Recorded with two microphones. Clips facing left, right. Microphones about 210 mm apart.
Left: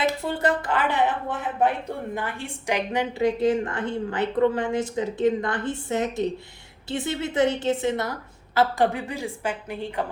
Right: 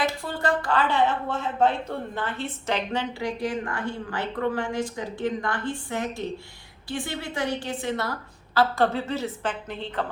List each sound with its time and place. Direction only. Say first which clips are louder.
0.2 s a woman's voice: left 2 dB; 20° left (ahead or behind)